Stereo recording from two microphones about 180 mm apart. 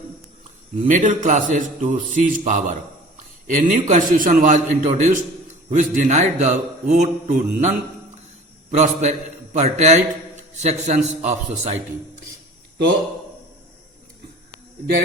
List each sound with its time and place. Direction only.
0.8 s a man's voice: 45° right (ahead or behind)